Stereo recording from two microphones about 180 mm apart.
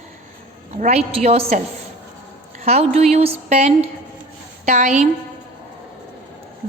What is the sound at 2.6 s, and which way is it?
A woman's voice, 35° right (ahead or behind).